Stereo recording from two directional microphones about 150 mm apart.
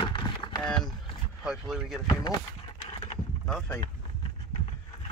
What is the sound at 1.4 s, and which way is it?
Speech, 5° right (ahead or behind).